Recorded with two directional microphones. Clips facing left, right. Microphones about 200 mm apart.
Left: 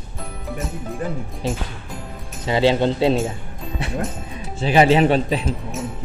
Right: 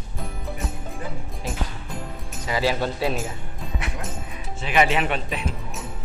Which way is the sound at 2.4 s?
25° left (ahead or behind).